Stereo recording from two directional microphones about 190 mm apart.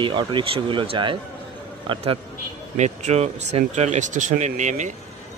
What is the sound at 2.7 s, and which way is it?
Speech, 35° right (ahead or behind).